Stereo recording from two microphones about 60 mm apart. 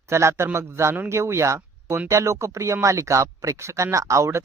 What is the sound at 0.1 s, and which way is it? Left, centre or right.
Speech, right.